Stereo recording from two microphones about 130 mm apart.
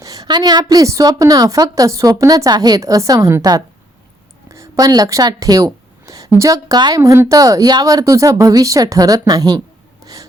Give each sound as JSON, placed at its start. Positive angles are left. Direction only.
{"t": 0.0, "sound": "a woman's voice", "side_deg": -30}